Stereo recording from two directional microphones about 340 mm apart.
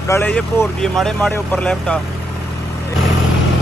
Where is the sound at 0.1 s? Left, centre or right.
Centre.